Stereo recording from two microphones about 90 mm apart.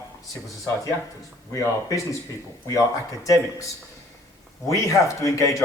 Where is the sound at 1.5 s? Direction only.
35° left (ahead or behind).